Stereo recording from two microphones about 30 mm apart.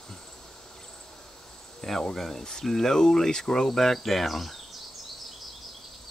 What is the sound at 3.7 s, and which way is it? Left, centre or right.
Speech, centre.